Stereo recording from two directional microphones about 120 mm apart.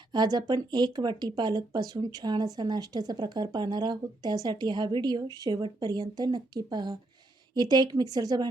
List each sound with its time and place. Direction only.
0.1 s speech: 35° right (ahead or behind)